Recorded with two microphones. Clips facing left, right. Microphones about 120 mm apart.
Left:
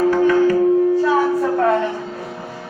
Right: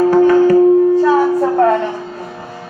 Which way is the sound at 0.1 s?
35° right (ahead or behind).